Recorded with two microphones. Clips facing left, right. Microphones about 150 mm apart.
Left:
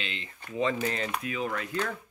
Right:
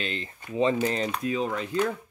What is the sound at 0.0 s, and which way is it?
Speech, 40° right (ahead or behind).